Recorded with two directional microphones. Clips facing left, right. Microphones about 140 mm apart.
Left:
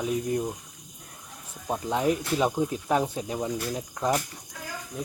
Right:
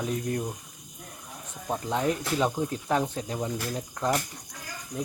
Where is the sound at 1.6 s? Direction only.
5° left (ahead or behind).